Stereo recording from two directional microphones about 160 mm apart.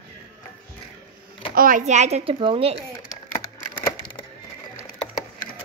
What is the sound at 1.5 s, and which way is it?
A child's voice, 55° right (ahead or behind).